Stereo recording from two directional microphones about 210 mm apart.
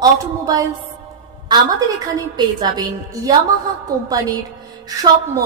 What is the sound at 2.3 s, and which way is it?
A woman's voice, 20° right (ahead or behind).